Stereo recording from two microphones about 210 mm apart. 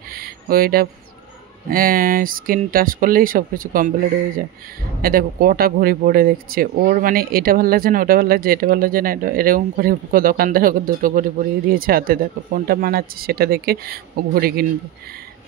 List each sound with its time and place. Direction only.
0.1 s a sound: 45° right (ahead or behind)
1.7 s speech: 40° right (ahead or behind)
5.0 s speech: 45° right (ahead or behind)